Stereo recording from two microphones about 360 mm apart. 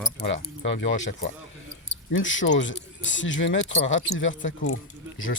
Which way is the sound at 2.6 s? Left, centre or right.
Left.